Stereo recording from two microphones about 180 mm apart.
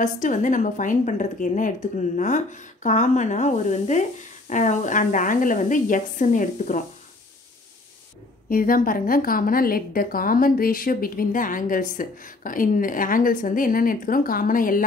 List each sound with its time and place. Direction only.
0.0 s speech: 45° left (ahead or behind)
8.5 s speech: 50° left (ahead or behind)